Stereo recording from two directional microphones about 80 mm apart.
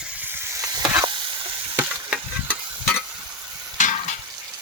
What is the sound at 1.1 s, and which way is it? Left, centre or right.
Stir, right.